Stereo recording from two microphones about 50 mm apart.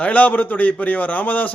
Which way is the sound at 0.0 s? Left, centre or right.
Left.